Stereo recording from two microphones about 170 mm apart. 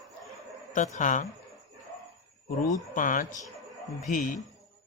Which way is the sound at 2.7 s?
50° left (ahead or behind).